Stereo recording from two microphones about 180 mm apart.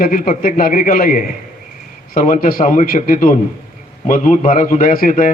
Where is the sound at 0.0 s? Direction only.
50° left (ahead or behind).